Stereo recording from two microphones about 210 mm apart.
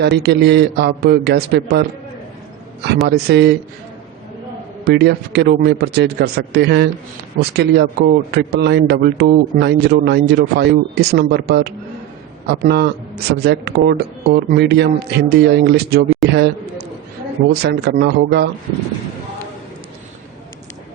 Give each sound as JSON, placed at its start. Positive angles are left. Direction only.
{"t": 0.0, "sound": "speech", "side_deg": -55}
{"t": 3.1, "sound": "speech", "side_deg": -50}
{"t": 4.9, "sound": "speech", "side_deg": -50}
{"t": 17.5, "sound": "speech", "side_deg": -50}